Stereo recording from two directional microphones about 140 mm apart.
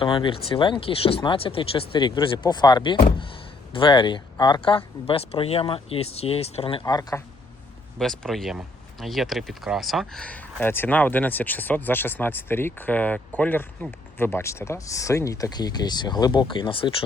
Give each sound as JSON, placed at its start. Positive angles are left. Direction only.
{"t": 0.0, "sound": "speech", "side_deg": 35}
{"t": 6.8, "sound": "speech", "side_deg": 30}
{"t": 7.9, "sound": "speech", "side_deg": 5}